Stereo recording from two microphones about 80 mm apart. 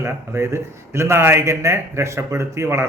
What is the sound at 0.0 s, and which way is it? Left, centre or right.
Speech, right.